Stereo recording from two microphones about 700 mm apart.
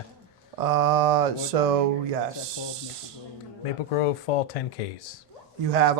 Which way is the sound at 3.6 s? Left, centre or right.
Left.